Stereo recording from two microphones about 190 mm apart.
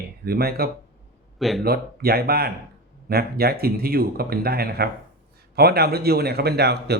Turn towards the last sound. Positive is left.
turn(degrees=-60)  # may be behind; listen again after turning